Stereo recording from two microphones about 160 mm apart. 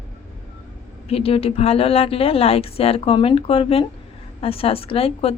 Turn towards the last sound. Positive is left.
turn(degrees=35)  # may be behind; listen again after turning